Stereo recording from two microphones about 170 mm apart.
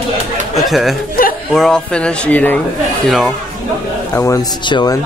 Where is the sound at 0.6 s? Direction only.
Centre (ahead or behind).